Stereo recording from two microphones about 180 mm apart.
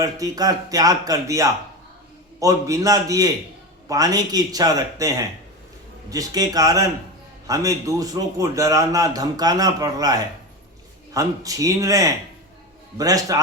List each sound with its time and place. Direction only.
0.0 s a man's voice: 20° right (ahead or behind)